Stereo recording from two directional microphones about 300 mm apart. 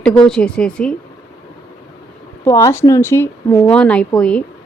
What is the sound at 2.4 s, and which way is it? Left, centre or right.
Speech, centre.